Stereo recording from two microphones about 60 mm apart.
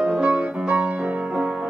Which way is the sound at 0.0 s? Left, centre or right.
Centre.